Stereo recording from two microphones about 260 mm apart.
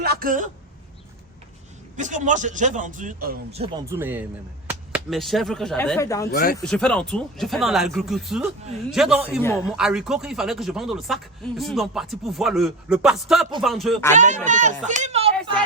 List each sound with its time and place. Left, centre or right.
0.0 s speech: right
2.0 s a man's voice: right
3.8 s speech: centre
6.3 s speech: left
6.6 s speech: centre
9.4 s a man's voice: centre
9.7 s speech: centre
14.2 s a man's voice: right